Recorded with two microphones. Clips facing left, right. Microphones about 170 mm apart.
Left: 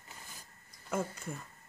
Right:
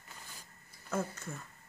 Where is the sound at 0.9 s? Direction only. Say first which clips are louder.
Left 1 dB; 10° left (ahead or behind).